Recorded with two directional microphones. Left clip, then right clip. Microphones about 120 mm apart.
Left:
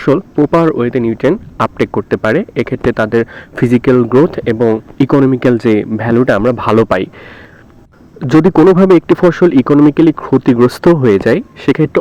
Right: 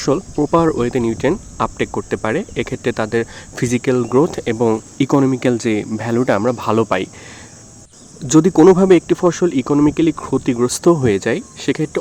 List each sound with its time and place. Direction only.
0.0 s speech: 25° left (ahead or behind)
1.5 s speech: 30° left (ahead or behind)
8.2 s speech: 40° left (ahead or behind)
10.9 s speech: 30° left (ahead or behind)